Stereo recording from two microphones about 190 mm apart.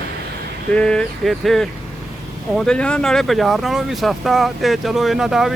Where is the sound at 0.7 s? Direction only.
5° left (ahead or behind).